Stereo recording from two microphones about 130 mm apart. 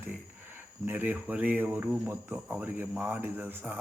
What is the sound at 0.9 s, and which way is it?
Speech, 15° right (ahead or behind).